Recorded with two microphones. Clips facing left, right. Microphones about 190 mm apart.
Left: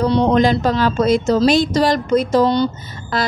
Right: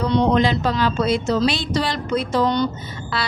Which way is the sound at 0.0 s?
45° left (ahead or behind).